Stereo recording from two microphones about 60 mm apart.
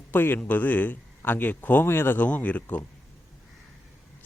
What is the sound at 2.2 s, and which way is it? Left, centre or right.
Speech, left.